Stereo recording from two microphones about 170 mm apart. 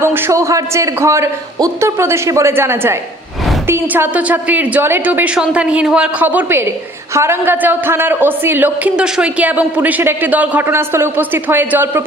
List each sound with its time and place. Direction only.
0.0 s speech: 15° right (ahead or behind)